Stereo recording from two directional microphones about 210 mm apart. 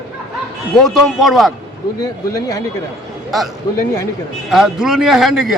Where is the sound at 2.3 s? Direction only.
15° left (ahead or behind).